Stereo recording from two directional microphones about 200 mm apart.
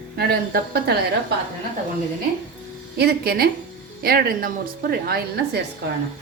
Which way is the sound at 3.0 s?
55° right (ahead or behind).